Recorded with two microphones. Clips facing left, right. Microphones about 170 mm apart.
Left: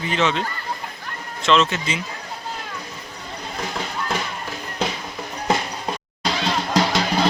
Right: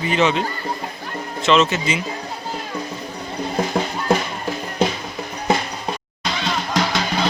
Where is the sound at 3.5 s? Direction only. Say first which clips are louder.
Right 6 dB; 50° right (ahead or behind).